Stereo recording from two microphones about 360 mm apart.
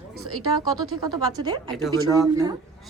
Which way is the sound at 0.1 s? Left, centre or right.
Right.